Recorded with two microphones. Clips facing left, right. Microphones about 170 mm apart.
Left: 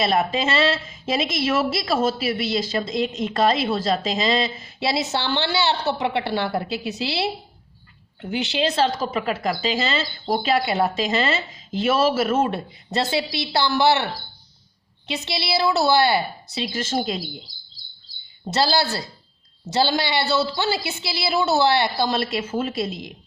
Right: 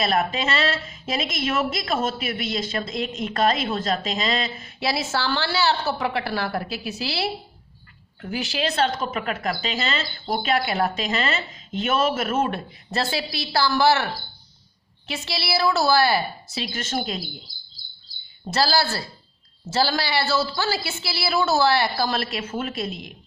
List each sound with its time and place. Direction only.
0.0 s a woman's voice: 25° left (ahead or behind)
18.4 s a woman's voice: 20° left (ahead or behind)